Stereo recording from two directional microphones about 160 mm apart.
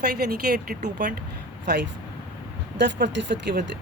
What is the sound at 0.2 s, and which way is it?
Speech, 80° right.